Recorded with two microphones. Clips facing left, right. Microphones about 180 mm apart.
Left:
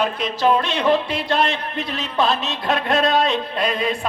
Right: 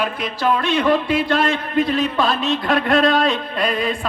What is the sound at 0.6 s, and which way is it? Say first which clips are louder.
A man's voice: right 2 dB; 50° right (ahead or behind).